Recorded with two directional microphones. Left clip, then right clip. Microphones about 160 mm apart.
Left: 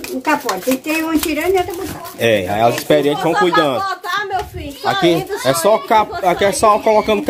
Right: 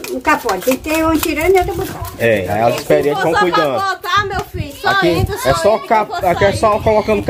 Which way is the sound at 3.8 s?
50° right (ahead or behind).